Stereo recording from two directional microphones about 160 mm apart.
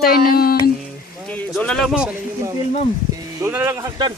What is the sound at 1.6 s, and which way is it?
Speech, 5° left (ahead or behind).